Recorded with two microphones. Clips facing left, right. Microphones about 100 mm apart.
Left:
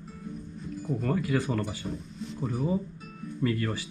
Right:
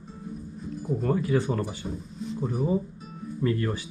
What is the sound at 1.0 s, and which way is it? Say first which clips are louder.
Speech: right 3 dB; 20° right (ahead or behind).